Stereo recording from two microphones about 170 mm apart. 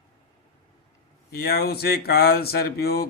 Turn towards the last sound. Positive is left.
turn(degrees=65)  # may be behind; listen again after turning